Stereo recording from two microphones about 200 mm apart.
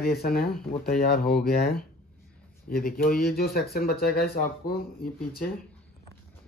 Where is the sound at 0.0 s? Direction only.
50° left (ahead or behind).